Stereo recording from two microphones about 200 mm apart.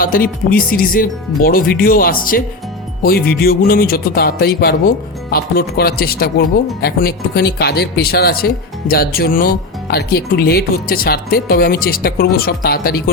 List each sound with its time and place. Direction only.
0.0 s speech: 45° left (ahead or behind)